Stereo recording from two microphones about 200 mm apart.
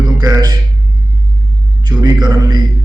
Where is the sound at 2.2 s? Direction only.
20° right (ahead or behind).